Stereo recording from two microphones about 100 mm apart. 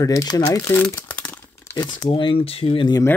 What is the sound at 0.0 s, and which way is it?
Speech, 40° left (ahead or behind).